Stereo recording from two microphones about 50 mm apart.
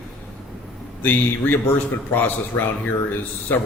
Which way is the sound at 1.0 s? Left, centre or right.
Left.